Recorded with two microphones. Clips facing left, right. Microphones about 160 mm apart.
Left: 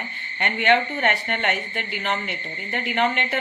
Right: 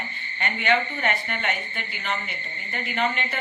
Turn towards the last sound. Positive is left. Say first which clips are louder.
# left 4 dB
turn(degrees=65)  # may be behind; listen again after turning